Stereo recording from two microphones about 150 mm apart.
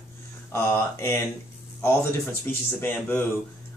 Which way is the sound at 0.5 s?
15° left (ahead or behind).